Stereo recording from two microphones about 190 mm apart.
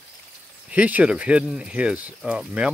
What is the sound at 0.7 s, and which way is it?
Speech, 10° right (ahead or behind).